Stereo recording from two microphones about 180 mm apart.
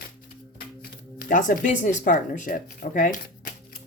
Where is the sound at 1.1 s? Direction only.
50° left (ahead or behind).